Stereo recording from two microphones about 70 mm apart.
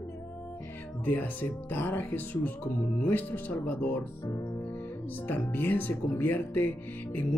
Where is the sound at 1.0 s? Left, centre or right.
Left.